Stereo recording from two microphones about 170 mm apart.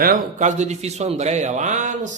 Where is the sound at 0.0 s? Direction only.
50° right (ahead or behind).